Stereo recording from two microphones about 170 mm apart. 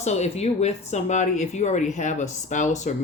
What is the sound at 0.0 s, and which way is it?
Speech, 40° left (ahead or behind).